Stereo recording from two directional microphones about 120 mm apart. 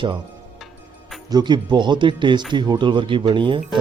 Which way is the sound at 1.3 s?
35° right (ahead or behind).